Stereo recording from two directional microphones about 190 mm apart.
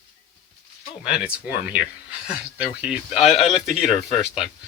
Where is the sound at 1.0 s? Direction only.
5° right (ahead or behind).